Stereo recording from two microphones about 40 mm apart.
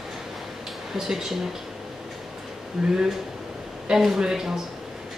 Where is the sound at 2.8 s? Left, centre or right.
Centre.